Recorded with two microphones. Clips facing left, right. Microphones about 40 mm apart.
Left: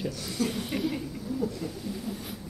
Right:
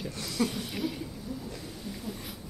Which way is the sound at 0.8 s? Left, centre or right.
Centre.